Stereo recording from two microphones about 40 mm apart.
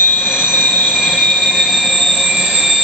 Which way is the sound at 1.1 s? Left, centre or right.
Centre.